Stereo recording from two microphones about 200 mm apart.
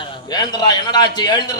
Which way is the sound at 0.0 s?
20° left (ahead or behind).